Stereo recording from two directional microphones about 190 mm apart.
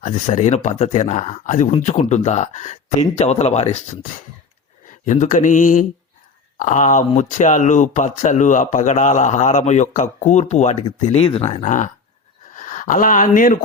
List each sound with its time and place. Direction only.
0.0 s speech: 40° left (ahead or behind)
4.9 s speech: 40° left (ahead or behind)